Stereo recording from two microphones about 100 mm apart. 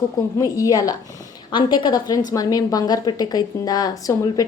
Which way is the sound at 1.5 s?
50° left (ahead or behind).